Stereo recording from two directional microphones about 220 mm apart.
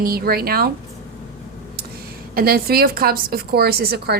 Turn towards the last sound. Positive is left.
turn(degrees=-45)  # may be behind; listen again after turning